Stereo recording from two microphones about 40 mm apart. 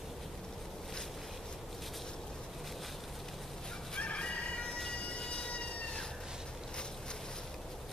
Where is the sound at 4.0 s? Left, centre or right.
Left.